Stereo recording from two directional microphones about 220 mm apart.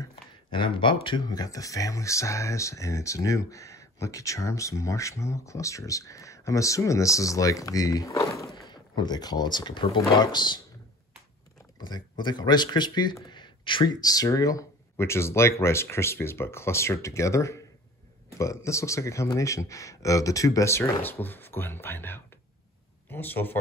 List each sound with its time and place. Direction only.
0.1 s a sound: 25° left (ahead or behind)
1.0 s speech: 20° left (ahead or behind)
11.8 s speech: 20° left (ahead or behind)